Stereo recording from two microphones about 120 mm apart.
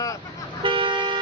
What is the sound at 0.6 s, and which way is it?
Vehicle, 45° right (ahead or behind).